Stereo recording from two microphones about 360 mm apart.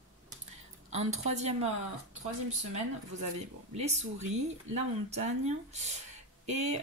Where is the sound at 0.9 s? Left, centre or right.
Centre.